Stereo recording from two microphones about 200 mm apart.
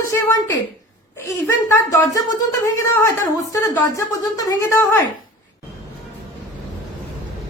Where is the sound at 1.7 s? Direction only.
15° left (ahead or behind).